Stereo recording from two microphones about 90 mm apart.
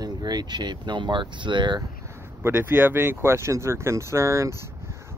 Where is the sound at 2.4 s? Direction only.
25° right (ahead or behind).